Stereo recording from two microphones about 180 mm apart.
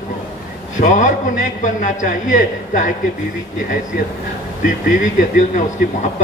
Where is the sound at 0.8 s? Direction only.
45° left (ahead or behind).